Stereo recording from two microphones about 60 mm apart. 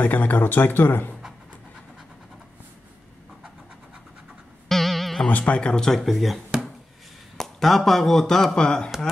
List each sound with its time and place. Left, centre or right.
0.0 s speech: left
4.6 s music: centre
5.3 s speech: left